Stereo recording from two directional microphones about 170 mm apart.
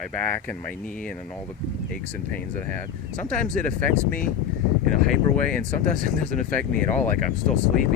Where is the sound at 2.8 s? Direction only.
10° left (ahead or behind).